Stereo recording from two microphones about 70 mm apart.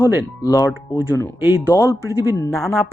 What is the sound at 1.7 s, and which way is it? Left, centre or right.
Speech, left.